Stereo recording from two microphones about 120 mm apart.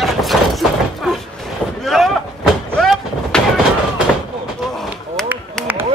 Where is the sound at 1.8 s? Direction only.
Centre (ahead or behind).